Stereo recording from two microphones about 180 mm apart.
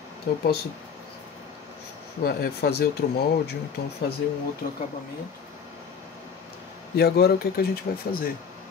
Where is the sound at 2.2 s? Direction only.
60° left (ahead or behind).